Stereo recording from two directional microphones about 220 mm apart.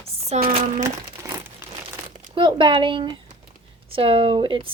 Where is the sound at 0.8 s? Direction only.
10° right (ahead or behind).